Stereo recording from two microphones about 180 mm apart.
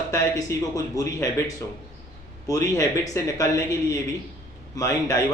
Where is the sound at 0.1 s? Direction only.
20° left (ahead or behind).